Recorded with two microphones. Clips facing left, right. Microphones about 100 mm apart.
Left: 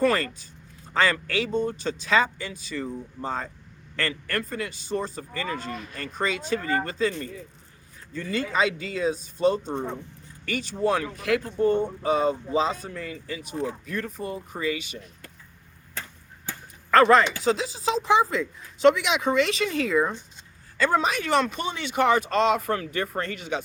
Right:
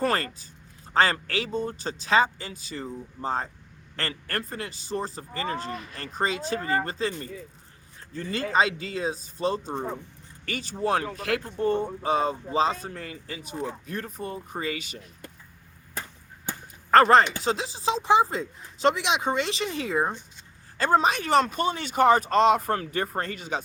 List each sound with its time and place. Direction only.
0.0 s speech: 35° right (ahead or behind)
5.7 s speech: centre (ahead or behind)
6.0 s speech: 35° right (ahead or behind)
11.5 s speech: centre (ahead or behind)
12.0 s speech: 35° right (ahead or behind)
16.9 s speech: 35° right (ahead or behind)
20.7 s speech: 40° right (ahead or behind)